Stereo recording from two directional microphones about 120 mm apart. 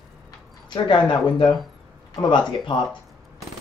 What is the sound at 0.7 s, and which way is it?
Speech, 40° left (ahead or behind).